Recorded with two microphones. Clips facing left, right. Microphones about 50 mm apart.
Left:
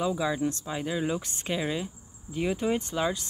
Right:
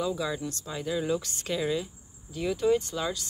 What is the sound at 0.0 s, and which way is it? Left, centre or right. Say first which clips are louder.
Speech: left 3 dB; left.